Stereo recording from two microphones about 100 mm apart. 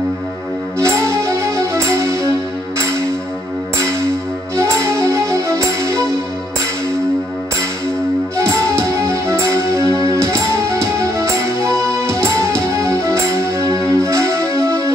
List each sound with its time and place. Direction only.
0.7 s music: 30° right (ahead or behind)
4.6 s music: 25° right (ahead or behind)
9.0 s music: 30° right (ahead or behind)